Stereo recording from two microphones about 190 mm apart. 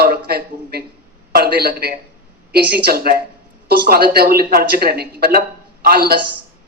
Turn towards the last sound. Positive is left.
turn(degrees=-55)  # may be behind; listen again after turning